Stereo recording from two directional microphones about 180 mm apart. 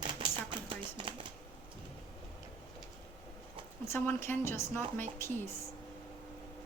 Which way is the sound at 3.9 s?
10° left (ahead or behind).